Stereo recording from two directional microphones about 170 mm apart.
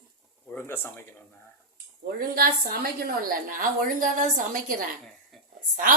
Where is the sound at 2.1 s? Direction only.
60° right (ahead or behind).